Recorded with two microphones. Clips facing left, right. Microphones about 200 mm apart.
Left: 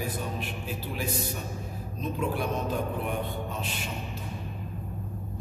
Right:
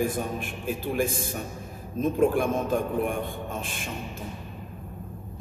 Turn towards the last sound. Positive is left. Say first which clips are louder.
# right 1 dB
turn(degrees=-50)  # may be behind; listen again after turning